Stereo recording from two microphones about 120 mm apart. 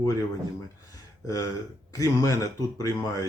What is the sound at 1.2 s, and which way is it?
Speech, 30° left (ahead or behind).